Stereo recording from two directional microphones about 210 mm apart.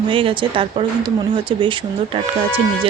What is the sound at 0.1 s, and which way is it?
Speech, 25° right (ahead or behind).